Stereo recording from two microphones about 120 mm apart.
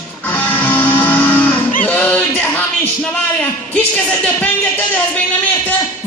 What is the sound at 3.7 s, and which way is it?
Speech, 15° left (ahead or behind).